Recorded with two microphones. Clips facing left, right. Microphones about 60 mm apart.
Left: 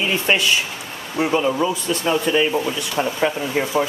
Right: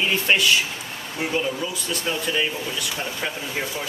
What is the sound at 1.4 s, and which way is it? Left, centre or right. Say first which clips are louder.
Speech: left 7 dB; left.